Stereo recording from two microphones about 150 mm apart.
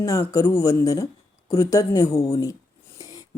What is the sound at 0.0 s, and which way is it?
Speech, 20° left (ahead or behind).